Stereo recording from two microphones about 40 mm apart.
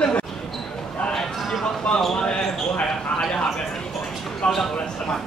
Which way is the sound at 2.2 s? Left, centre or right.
Left.